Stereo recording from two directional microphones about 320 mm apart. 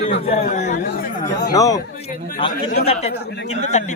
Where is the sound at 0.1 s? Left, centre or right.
Centre.